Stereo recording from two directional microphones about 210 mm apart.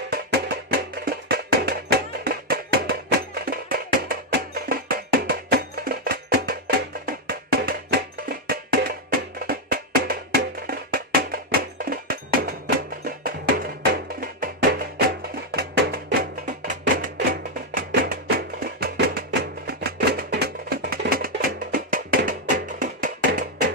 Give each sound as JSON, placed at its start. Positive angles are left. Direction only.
{"t": 0.1, "sound": "music", "side_deg": -50}